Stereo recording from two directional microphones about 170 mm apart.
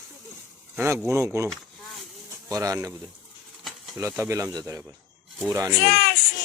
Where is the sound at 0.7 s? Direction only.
15° right (ahead or behind).